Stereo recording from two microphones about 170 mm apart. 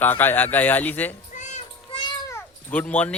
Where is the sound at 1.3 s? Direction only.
45° left (ahead or behind).